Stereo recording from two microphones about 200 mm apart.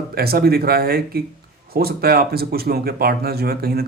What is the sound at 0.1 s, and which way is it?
A man's voice, 50° right (ahead or behind).